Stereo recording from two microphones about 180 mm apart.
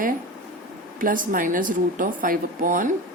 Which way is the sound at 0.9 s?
50° right (ahead or behind).